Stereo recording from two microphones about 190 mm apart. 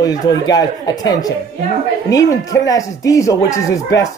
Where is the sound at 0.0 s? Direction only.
20° left (ahead or behind).